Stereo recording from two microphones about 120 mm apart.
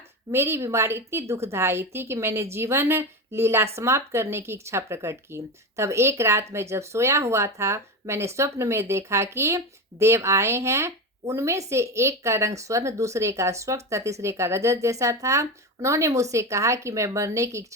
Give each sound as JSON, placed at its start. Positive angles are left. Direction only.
{"t": 0.3, "sound": "speech", "side_deg": -20}